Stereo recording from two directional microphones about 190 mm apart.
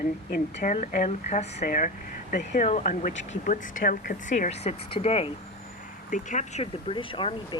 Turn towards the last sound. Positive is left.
turn(degrees=25)  # may be behind; listen again after turning